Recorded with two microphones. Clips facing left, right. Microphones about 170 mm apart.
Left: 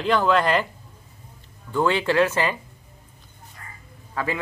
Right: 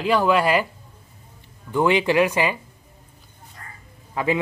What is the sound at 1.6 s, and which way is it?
Speech, 15° right (ahead or behind).